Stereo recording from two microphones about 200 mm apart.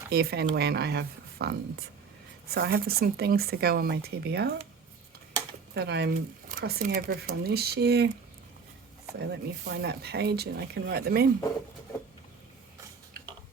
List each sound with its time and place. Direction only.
0.1 s speech: 50° right (ahead or behind)
5.7 s speech: 55° right (ahead or behind)
9.1 s speech: 55° right (ahead or behind)